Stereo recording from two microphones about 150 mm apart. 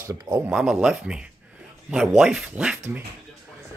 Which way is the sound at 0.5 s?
5° right (ahead or behind).